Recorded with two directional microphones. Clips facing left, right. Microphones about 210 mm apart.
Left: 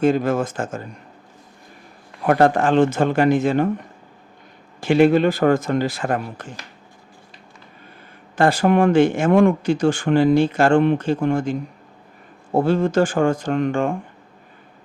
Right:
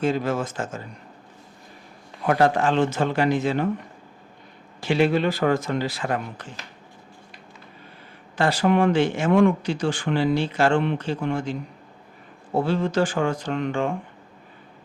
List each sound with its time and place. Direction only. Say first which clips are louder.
0.0 s speech: left 5 dB; 50° left (ahead or behind)
2.2 s speech: left 4 dB; 50° left (ahead or behind)
4.8 s speech: left 6 dB; 50° left (ahead or behind)
8.4 s speech: left 4 dB; 50° left (ahead or behind)
12.5 s speech: left 5 dB; 50° left (ahead or behind)